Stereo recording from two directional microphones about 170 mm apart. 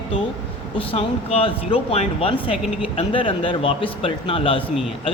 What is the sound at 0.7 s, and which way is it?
Speech, 35° left (ahead or behind).